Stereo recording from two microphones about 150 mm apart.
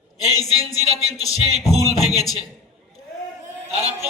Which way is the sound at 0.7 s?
25° left (ahead or behind).